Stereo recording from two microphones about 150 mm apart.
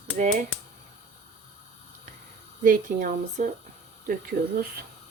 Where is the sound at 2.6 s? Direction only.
60° right (ahead or behind).